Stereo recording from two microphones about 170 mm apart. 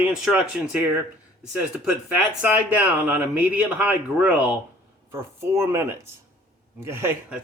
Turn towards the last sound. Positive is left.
turn(degrees=-15)  # may be behind; listen again after turning